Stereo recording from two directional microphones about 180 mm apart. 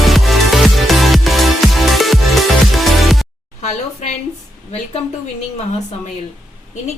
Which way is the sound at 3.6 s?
40° left (ahead or behind).